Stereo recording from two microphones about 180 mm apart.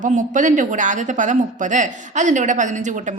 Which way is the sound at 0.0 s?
45° right (ahead or behind).